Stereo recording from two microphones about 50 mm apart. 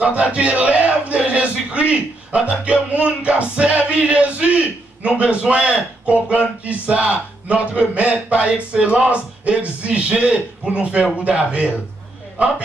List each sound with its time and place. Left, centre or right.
0.0 s speech: right